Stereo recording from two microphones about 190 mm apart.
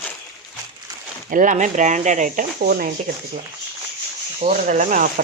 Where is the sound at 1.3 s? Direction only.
45° right (ahead or behind).